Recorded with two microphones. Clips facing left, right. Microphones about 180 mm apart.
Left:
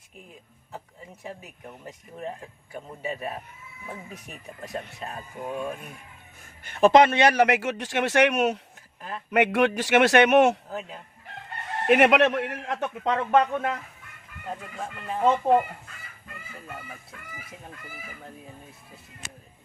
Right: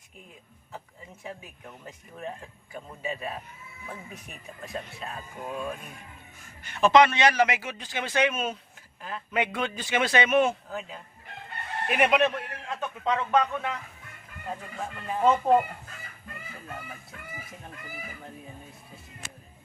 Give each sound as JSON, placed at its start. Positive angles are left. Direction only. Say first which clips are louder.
{"t": 3.1, "sound": "speech", "louder": "left 2 dB", "side_deg": 10}
{"t": 6.7, "sound": "a man's voice", "louder": "left 3 dB", "side_deg": 50}
{"t": 11.9, "sound": "a man's voice", "louder": "left 5 dB", "side_deg": 75}
{"t": 13.1, "sound": "speech", "louder": "left 3 dB", "side_deg": 50}
{"t": 14.5, "sound": "speech", "louder": "left 1 dB", "side_deg": 0}